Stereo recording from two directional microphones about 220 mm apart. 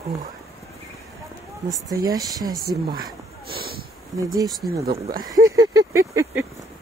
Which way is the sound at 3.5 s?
45° right (ahead or behind).